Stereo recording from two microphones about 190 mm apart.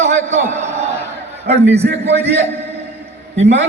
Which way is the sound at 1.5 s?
35° right (ahead or behind).